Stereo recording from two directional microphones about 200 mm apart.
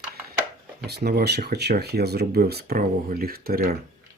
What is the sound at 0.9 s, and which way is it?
Speech, 55° right (ahead or behind).